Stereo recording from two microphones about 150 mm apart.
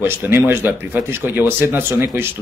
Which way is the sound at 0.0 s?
15° right (ahead or behind).